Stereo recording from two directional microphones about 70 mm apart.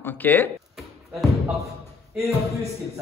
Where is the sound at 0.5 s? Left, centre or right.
Centre.